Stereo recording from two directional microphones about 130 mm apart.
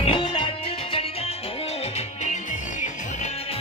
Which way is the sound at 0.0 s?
40° left (ahead or behind).